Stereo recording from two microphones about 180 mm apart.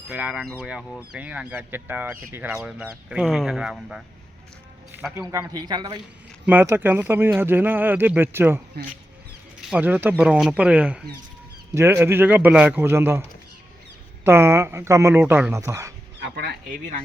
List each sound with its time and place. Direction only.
0.1 s speech: 10° right (ahead or behind)
5.3 s a man's voice: 20° right (ahead or behind)
6.4 s speech: 10° right (ahead or behind)
9.6 s speech: 5° right (ahead or behind)
14.3 s speech: 15° right (ahead or behind)
16.2 s a sound: 65° right (ahead or behind)